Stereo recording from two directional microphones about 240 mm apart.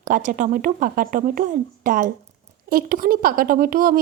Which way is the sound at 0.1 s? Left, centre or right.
Right.